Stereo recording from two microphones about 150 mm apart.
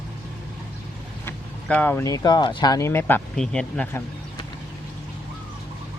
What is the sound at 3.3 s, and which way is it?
Speech, 5° left (ahead or behind).